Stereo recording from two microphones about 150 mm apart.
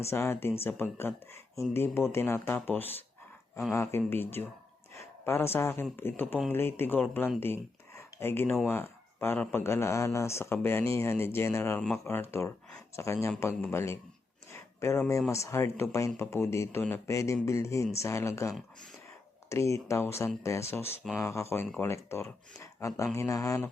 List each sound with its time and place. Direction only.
0.1 s speech: 15° left (ahead or behind)
14.5 s a sound: 20° left (ahead or behind)
15.3 s speech: 20° left (ahead or behind)